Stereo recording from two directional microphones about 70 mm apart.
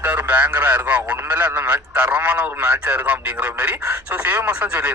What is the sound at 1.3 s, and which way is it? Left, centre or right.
A man's voice, right.